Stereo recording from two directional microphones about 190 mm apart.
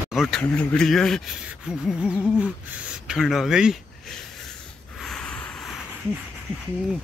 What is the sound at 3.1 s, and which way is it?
Speech, centre (ahead or behind).